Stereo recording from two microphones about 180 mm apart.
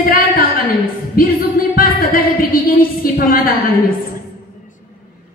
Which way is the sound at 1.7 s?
55° left (ahead or behind).